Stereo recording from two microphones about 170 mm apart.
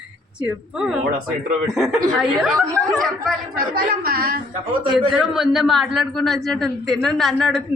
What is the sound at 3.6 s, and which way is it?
Speech, 60° right (ahead or behind).